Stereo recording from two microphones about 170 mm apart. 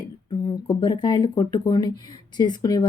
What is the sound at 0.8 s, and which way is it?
A woman's voice, 30° left (ahead or behind).